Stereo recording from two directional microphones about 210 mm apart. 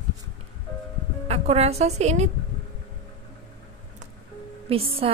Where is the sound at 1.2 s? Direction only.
30° right (ahead or behind).